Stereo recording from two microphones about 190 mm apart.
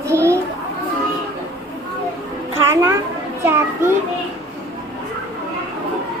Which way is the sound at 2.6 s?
10° right (ahead or behind).